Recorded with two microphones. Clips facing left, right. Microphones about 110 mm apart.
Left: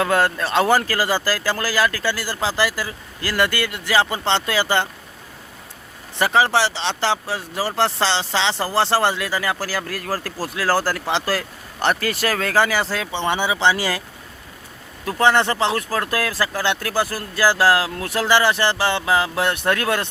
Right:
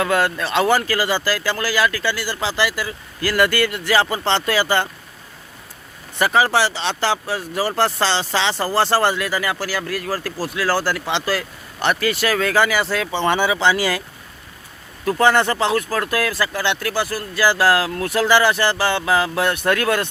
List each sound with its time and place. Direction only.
0.0 s speech: 35° left (ahead or behind)
6.1 s speech: 25° left (ahead or behind)
13.2 s speech: 20° left (ahead or behind)
15.0 s speech: 25° left (ahead or behind)